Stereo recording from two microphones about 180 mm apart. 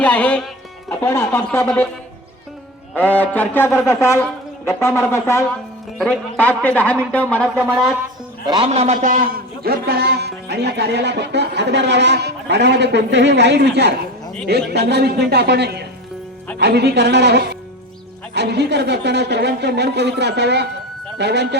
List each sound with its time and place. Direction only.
0.0 s speech: 5° left (ahead or behind)
2.9 s speech: 10° left (ahead or behind)
8.4 s a man's voice: 30° right (ahead or behind); by 21.6 s 70° right (ahead or behind)